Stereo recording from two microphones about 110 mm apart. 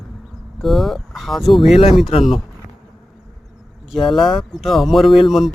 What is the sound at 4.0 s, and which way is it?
Speech, 50° left (ahead or behind).